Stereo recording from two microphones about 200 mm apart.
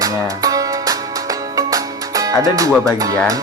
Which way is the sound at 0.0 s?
15° right (ahead or behind).